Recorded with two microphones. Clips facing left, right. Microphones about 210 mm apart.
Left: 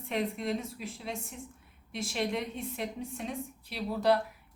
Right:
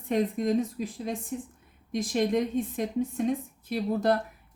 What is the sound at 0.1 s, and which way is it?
A woman's voice, 45° right (ahead or behind).